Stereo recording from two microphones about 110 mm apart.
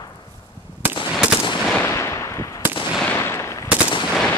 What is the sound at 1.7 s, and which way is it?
Firecracker, 20° left (ahead or behind).